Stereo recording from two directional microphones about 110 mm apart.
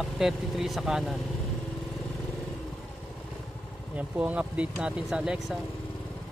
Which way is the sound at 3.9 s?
10° right (ahead or behind).